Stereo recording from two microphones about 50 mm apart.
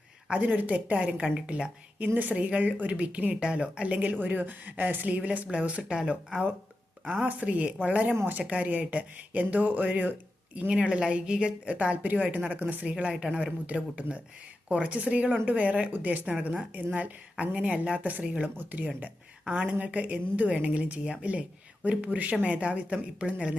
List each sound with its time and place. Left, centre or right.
0.3 s a woman's voice: right
1.1 s a woman's voice: centre
7.1 s a woman's voice: right
10.7 s a woman's voice: right
18.5 s speech: right
19.5 s a woman's voice: right